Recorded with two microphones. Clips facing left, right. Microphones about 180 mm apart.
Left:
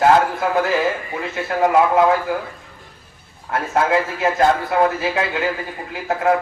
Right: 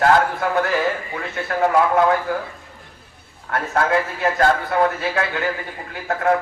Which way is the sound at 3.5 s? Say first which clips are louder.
Left 2 dB; 20° left (ahead or behind).